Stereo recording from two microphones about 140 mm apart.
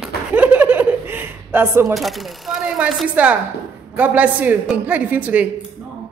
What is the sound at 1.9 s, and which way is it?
A woman's voice, centre (ahead or behind).